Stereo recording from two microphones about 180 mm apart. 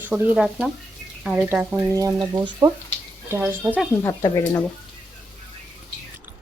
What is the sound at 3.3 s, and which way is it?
Speech, 10° right (ahead or behind).